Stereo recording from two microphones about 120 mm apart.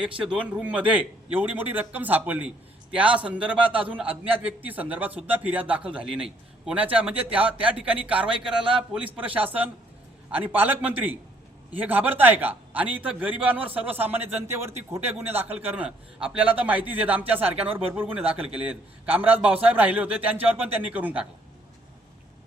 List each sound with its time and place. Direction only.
0.0 s a man's voice: 10° right (ahead or behind)
17.4 s speech: 55° right (ahead or behind)
17.9 s a man's voice: 15° right (ahead or behind)